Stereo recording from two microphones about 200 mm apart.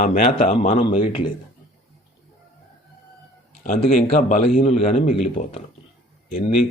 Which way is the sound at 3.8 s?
40° left (ahead or behind).